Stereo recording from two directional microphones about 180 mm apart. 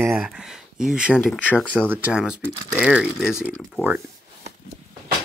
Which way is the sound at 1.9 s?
5° right (ahead or behind).